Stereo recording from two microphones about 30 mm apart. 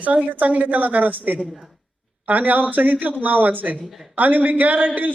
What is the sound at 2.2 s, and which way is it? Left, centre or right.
A man's voice, right.